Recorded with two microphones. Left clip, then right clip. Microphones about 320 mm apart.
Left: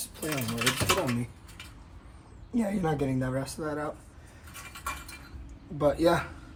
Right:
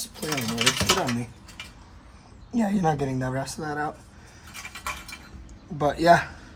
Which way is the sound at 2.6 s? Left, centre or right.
Right.